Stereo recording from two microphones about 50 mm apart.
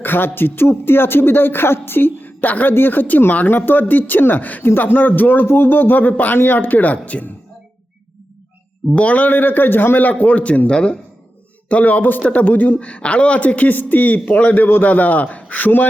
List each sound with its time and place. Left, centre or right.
0.0 s speech: left
9.0 s speech: left
11.7 s speech: left